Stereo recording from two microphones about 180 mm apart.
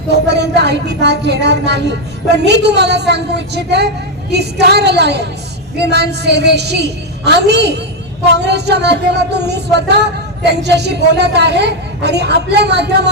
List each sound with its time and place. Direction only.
0.1 s speech: 70° right (ahead or behind)